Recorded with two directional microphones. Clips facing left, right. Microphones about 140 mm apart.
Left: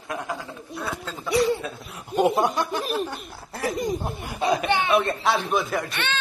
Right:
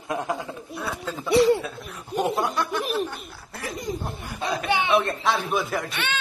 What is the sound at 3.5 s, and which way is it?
Speech, 35° left (ahead or behind).